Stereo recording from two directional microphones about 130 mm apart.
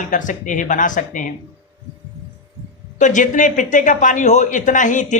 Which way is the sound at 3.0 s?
70° left (ahead or behind).